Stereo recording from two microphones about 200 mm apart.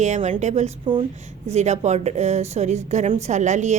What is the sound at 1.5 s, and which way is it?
A woman's voice, 35° right (ahead or behind).